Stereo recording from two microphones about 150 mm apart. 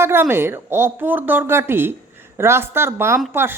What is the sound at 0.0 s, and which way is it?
A woman's voice, 15° right (ahead or behind).